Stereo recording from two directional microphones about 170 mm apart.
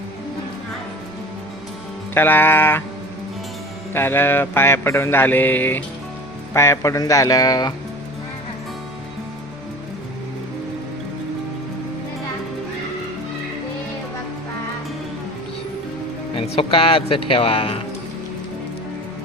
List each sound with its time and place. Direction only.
2.1 s mantra: 10° left (ahead or behind)
3.9 s mantra: 15° left (ahead or behind)
6.5 s speech: 15° left (ahead or behind)
16.3 s speech: 35° left (ahead or behind)